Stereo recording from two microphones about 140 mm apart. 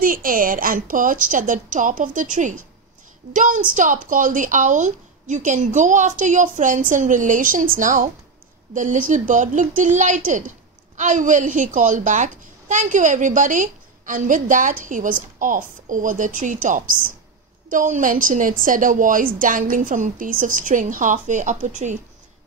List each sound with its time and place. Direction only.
0.0 s a child's voice: 90° right; by 21.9 s 60° right (ahead or behind)